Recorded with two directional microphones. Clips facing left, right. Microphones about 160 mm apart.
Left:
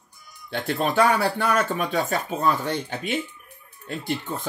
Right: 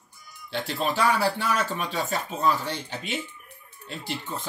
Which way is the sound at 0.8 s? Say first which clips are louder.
Left 3 dB; 50° left (ahead or behind).